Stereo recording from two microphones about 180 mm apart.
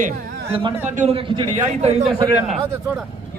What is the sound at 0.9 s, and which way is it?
A man's voice, 35° right (ahead or behind).